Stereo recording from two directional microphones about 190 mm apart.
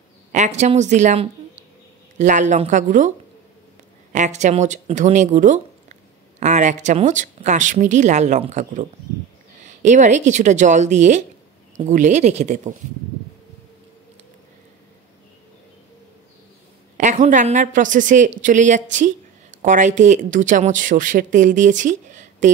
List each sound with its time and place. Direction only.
0.3 s speech: 40° right (ahead or behind)
4.1 s speech: 40° right (ahead or behind)
16.9 s speech: 40° right (ahead or behind)